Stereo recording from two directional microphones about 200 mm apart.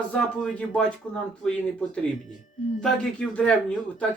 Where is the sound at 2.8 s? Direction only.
5° left (ahead or behind).